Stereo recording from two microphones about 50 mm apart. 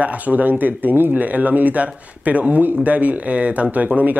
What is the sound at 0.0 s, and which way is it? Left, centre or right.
A man's voice, right.